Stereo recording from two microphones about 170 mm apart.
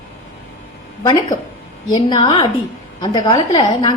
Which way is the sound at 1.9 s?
25° left (ahead or behind).